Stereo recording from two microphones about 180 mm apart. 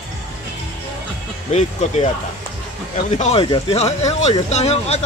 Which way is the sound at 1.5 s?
40° left (ahead or behind).